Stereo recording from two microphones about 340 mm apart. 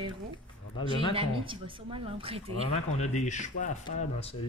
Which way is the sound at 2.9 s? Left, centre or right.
Centre.